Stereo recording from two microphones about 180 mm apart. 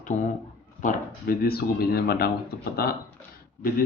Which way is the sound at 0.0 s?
45° left (ahead or behind).